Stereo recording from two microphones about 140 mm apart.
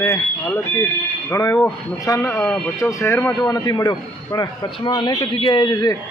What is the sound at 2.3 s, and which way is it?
Speech, 5° left (ahead or behind).